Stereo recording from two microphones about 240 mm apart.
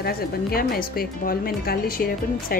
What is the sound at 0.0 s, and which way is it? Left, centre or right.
A woman's voice, left.